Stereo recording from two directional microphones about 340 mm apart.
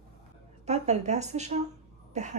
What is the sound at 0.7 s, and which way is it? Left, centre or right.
Speech, centre.